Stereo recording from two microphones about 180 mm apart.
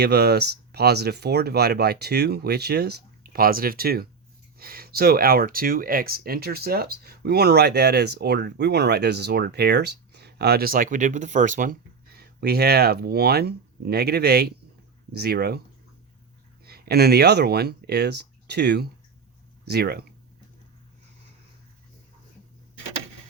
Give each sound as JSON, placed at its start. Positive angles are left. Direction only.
{"t": 0.0, "sound": "speech", "side_deg": -65}
{"t": 16.6, "sound": "speech", "side_deg": -60}